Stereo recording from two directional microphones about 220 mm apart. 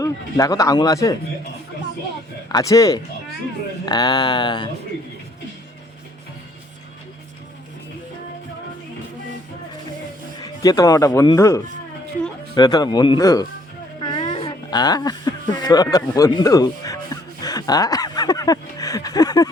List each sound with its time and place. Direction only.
0.0 s speech: 15° left (ahead or behind)
2.5 s speech: 15° left (ahead or behind)
10.4 s speech: 15° left (ahead or behind)
14.0 s a sound: 20° left (ahead or behind)